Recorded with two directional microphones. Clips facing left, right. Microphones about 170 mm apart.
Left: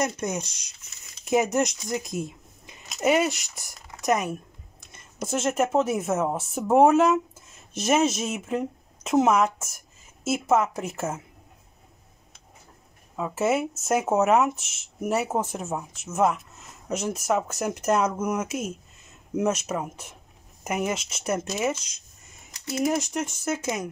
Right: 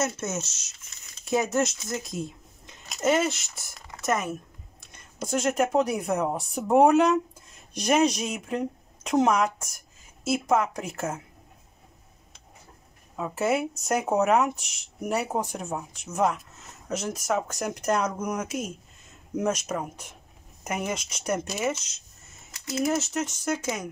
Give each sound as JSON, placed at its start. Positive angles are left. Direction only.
{"t": 0.0, "sound": "speech", "side_deg": 15}
{"t": 5.2, "sound": "speech", "side_deg": 5}
{"t": 13.1, "sound": "speech", "side_deg": 0}
{"t": 22.8, "sound": "speech", "side_deg": 10}